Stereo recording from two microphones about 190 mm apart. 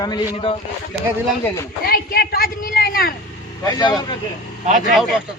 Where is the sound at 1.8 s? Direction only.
55° left (ahead or behind).